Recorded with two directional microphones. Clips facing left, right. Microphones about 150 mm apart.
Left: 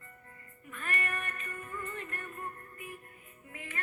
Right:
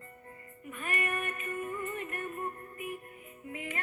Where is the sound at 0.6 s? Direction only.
15° right (ahead or behind).